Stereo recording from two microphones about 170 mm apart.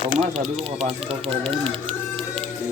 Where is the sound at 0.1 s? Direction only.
35° right (ahead or behind).